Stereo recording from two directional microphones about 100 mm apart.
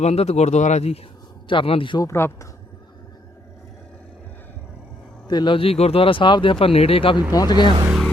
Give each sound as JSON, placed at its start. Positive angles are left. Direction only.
{"t": 0.0, "sound": "speech", "side_deg": 90}
{"t": 1.5, "sound": "speech", "side_deg": 65}
{"t": 2.0, "sound": "speech", "side_deg": 25}
{"t": 5.3, "sound": "speech", "side_deg": 45}
{"t": 5.5, "sound": "speech", "side_deg": 80}
{"t": 7.3, "sound": "speech", "side_deg": 40}